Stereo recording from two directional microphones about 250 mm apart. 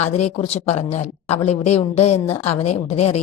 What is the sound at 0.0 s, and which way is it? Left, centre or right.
A woman's voice, left.